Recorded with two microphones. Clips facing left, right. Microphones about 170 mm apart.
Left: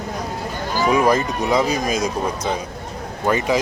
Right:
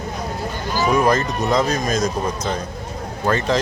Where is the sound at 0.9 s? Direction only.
10° left (ahead or behind).